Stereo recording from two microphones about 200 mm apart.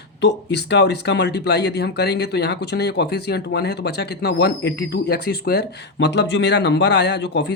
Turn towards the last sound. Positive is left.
turn(degrees=60)  # may be behind; listen again after turning